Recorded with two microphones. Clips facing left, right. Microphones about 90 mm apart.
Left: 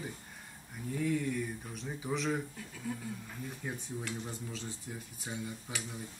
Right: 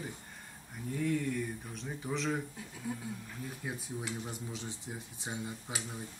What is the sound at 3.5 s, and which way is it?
Speech, 10° right (ahead or behind).